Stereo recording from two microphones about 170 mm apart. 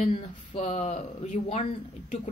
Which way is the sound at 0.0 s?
45° left (ahead or behind).